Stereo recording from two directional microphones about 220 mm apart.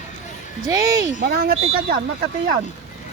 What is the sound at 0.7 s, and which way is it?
Speech, 15° right (ahead or behind).